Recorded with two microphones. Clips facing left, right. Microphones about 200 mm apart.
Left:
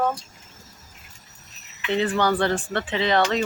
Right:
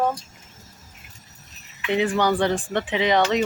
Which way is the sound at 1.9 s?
15° right (ahead or behind).